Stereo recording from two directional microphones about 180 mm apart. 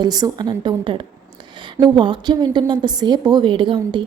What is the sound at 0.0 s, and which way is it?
A woman's voice, 20° right (ahead or behind).